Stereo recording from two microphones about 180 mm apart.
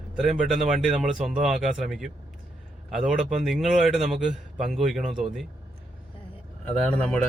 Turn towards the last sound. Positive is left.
turn(degrees=5)  # may be behind; listen again after turning